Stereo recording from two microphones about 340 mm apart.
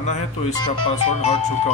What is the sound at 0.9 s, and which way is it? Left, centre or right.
Speech, centre.